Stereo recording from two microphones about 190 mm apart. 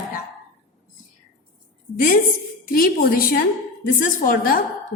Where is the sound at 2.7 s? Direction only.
50° left (ahead or behind).